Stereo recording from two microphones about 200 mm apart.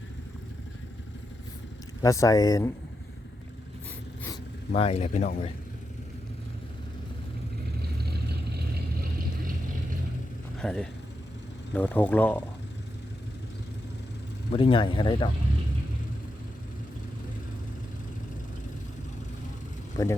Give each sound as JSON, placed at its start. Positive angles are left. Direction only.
{"t": 2.0, "sound": "speech", "side_deg": 15}
{"t": 4.7, "sound": "speech", "side_deg": 30}
{"t": 7.8, "sound": "vehicle", "side_deg": -55}
{"t": 10.6, "sound": "speech", "side_deg": 5}
{"t": 14.5, "sound": "speech", "side_deg": 25}
{"t": 20.0, "sound": "speech", "side_deg": 20}